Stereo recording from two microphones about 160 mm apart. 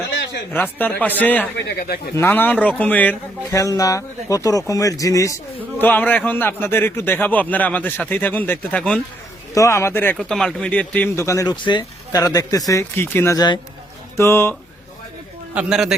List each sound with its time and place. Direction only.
0.5 s a man's voice: 10° left (ahead or behind)
1.8 s speech: 70° left (ahead or behind)
2.1 s a man's voice: 15° left (ahead or behind)
9.6 s a man's voice: 15° left (ahead or behind)
10.2 s a man's voice: 5° left (ahead or behind)
15.5 s a man's voice: 5° right (ahead or behind)